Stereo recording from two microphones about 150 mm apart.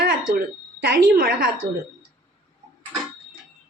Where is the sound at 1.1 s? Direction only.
75° right (ahead or behind).